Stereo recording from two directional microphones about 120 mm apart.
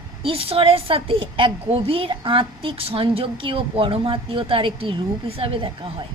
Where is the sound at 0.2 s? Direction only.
50° right (ahead or behind).